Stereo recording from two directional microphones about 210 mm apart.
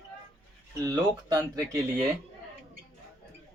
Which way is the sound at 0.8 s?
15° right (ahead or behind).